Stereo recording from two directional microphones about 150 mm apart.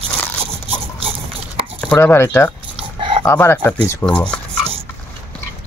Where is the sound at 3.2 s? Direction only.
15° left (ahead or behind).